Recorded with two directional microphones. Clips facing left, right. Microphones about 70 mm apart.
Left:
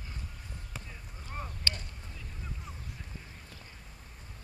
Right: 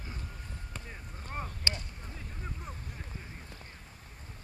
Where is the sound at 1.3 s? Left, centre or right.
Right.